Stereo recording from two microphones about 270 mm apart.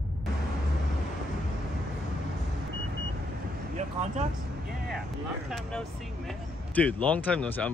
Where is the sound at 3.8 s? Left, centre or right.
Right.